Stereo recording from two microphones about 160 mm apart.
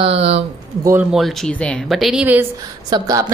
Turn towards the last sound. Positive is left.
turn(degrees=-25)  # may be behind; listen again after turning